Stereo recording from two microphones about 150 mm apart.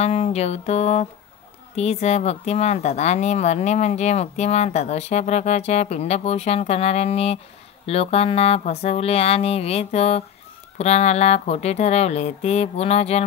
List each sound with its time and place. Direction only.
0.0 s speech: 45° left (ahead or behind)